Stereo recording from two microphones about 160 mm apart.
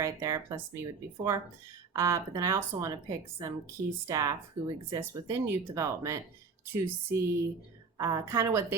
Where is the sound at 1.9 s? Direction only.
20° right (ahead or behind).